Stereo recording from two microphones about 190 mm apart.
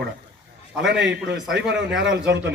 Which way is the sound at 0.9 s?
65° right (ahead or behind).